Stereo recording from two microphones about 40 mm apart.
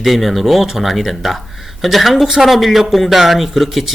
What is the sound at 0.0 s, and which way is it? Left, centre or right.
Speech, centre.